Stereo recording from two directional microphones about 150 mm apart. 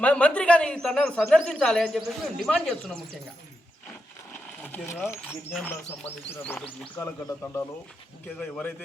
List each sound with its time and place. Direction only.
0.0 s speech: 10° left (ahead or behind)
4.3 s a sound: 10° left (ahead or behind)
4.9 s speech: 15° left (ahead or behind)